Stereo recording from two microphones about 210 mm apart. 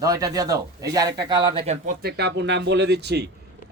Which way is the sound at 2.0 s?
55° right (ahead or behind).